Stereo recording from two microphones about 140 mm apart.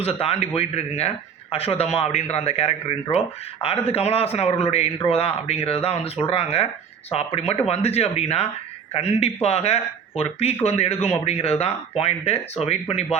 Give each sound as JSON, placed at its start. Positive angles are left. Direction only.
{"t": 0.0, "sound": "speech", "side_deg": 45}